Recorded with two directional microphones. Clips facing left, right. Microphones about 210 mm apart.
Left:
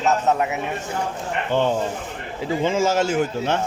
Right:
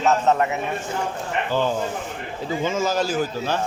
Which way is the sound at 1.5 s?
25° left (ahead or behind).